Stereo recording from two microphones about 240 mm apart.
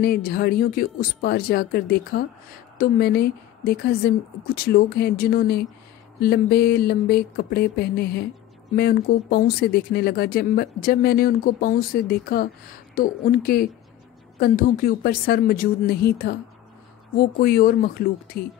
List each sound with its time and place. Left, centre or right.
0.0 s speech: left